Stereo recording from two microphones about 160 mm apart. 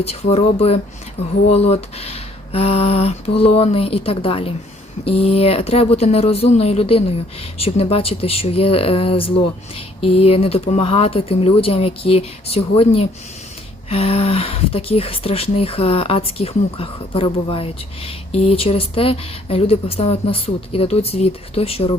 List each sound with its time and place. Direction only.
0.0 s speech: 40° left (ahead or behind)